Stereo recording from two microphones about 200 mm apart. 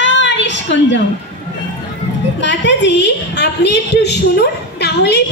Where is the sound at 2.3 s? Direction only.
60° left (ahead or behind).